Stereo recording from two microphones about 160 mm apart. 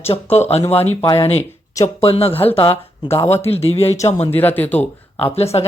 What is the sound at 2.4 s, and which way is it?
Speech, 10° left (ahead or behind).